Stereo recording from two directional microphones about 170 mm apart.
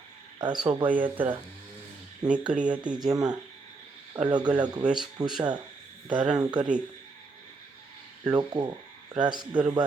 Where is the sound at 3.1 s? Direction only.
20° right (ahead or behind).